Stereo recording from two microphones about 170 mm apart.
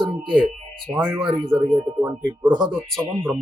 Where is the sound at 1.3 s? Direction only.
30° right (ahead or behind).